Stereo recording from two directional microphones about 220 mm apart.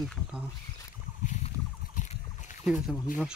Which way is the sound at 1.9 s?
35° left (ahead or behind).